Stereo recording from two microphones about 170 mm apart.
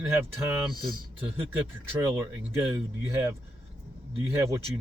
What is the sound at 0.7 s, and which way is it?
Speech, 25° left (ahead or behind).